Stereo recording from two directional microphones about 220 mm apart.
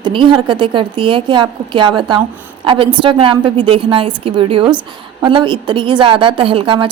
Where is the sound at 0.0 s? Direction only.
20° right (ahead or behind).